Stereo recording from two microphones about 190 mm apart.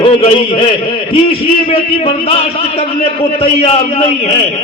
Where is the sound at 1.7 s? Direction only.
30° left (ahead or behind).